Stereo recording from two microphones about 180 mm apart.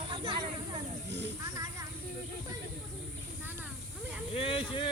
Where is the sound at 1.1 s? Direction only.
75° right (ahead or behind).